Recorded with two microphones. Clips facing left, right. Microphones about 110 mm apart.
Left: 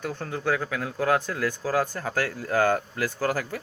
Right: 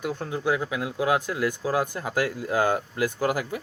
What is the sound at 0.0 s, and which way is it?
Speech, 10° right (ahead or behind).